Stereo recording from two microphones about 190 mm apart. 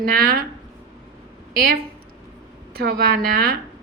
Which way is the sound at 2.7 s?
55° right (ahead or behind).